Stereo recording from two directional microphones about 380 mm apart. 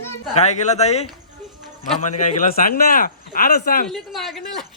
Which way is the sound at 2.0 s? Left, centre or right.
Centre.